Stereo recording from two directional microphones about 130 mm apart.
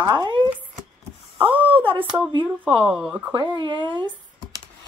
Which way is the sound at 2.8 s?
5° right (ahead or behind).